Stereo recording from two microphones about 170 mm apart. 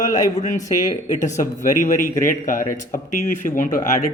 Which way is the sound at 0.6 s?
20° left (ahead or behind).